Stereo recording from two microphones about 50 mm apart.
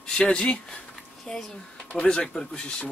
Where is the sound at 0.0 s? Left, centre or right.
Centre.